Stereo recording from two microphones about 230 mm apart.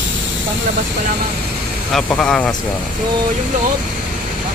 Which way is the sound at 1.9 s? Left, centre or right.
Centre.